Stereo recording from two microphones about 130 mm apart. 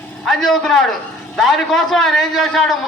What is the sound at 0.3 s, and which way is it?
A man's voice, 5° left (ahead or behind).